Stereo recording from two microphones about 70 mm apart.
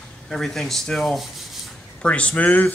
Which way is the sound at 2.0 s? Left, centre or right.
Centre.